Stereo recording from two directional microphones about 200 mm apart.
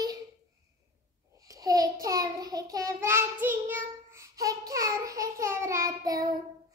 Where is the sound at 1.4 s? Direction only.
15° right (ahead or behind).